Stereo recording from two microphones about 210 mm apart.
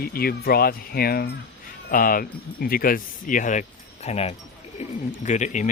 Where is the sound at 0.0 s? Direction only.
45° left (ahead or behind).